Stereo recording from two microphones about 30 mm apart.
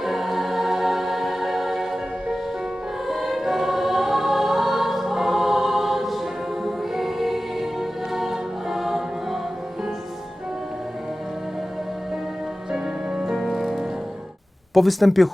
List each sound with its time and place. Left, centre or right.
0.0 s music: centre
3.1 s choir: centre
6.7 s music: centre
12.7 s music: right
13.4 s music: centre
14.7 s speech: centre